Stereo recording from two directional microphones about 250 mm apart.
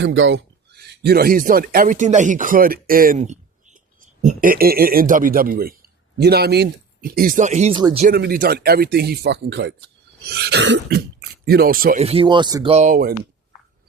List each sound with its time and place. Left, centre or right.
0.0 s speech: right
7.8 s speech: centre
8.0 s speech: right; by 12.7 s centre
12.7 s speech: right